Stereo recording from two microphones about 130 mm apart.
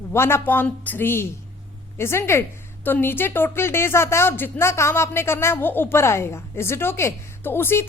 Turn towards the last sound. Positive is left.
turn(degrees=15)  # may be behind; listen again after turning